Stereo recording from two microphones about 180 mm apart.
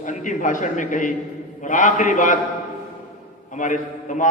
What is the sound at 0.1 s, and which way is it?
A man's voice, 45° left (ahead or behind).